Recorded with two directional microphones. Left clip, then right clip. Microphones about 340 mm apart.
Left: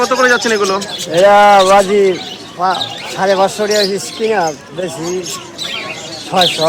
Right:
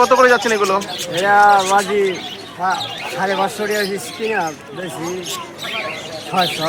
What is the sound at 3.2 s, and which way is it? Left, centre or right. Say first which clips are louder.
Speech: left 7 dB; left.